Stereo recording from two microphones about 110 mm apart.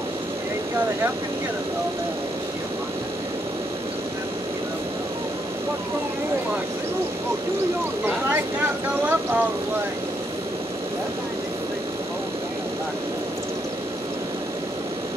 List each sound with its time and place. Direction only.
9.0 s speech: 20° right (ahead or behind)